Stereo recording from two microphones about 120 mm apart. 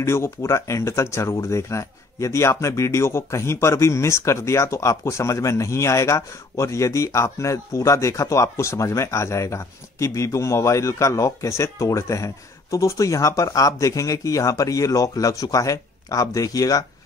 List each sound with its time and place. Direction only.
0.0 s speech: 20° left (ahead or behind)